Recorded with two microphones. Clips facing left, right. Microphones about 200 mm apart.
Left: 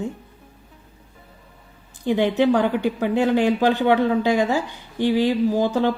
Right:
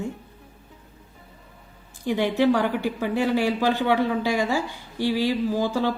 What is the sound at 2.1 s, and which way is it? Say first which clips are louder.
A woman's voice: left 3 dB; 20° left (ahead or behind).